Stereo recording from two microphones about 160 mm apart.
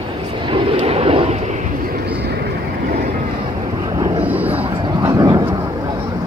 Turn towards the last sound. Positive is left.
turn(degrees=-20)  # may be behind; listen again after turning